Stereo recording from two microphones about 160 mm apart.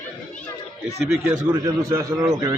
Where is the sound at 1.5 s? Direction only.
20° right (ahead or behind).